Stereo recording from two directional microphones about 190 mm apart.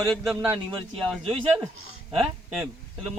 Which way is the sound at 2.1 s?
30° right (ahead or behind).